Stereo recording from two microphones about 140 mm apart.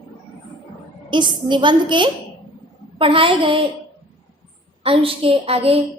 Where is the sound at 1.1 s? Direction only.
35° right (ahead or behind).